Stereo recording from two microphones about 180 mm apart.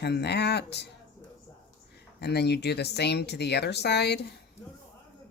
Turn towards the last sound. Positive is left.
turn(degrees=65)  # may be behind; listen again after turning